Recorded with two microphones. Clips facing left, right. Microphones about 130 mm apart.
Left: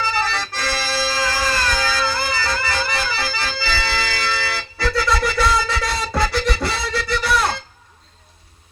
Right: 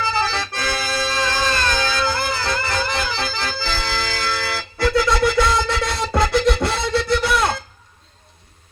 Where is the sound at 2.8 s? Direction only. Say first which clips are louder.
Even; 20° right (ahead or behind).